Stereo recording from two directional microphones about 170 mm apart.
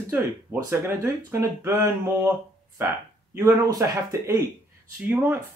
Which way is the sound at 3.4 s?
20° right (ahead or behind).